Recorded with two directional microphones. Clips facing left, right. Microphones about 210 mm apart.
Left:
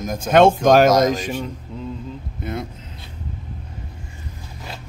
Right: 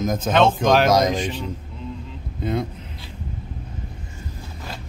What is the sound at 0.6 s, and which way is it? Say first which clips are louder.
Speech: left 4 dB; 45° left (ahead or behind).